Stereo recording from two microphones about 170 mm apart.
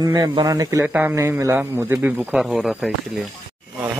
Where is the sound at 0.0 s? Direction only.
25° right (ahead or behind).